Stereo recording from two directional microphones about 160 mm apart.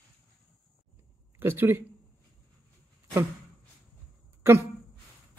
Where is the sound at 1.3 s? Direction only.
15° right (ahead or behind).